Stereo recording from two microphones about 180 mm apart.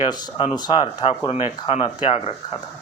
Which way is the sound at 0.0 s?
20° left (ahead or behind).